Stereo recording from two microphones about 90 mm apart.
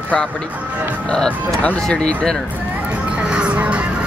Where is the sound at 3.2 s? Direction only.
10° right (ahead or behind).